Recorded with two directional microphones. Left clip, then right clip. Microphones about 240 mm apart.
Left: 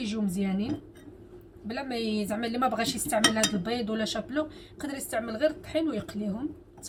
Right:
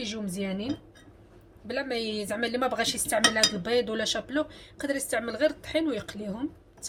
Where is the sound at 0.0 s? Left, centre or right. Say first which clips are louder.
Left 1 dB; right.